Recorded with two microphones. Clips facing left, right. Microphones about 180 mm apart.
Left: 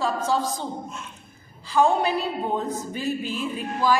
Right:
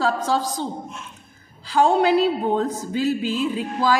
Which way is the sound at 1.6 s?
90° right.